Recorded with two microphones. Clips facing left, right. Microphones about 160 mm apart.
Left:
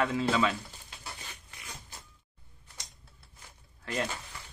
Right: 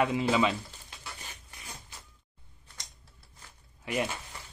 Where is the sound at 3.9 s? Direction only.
15° right (ahead or behind).